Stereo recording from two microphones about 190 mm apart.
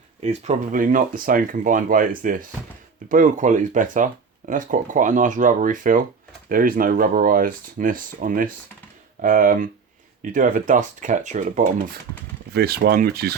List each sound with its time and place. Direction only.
0.2 s speech: 35° right (ahead or behind)
12.5 s speech: 55° right (ahead or behind)